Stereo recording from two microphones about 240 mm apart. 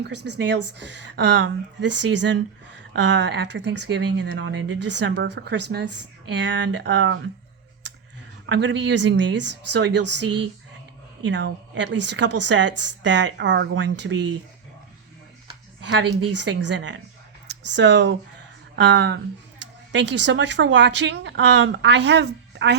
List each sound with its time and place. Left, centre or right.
0.3 s speech: right
8.4 s speech: right
11.3 s speech: right
15.9 s speech: right